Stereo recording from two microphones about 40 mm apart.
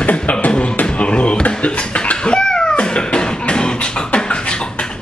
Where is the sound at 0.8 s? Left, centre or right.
Left.